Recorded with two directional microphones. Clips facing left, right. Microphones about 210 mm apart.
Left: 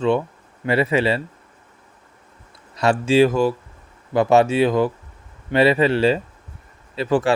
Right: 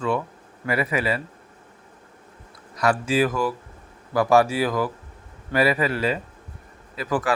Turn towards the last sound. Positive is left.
turn(degrees=25)  # may be behind; listen again after turning